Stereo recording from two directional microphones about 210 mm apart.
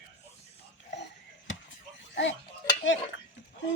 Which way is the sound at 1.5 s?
65° left (ahead or behind).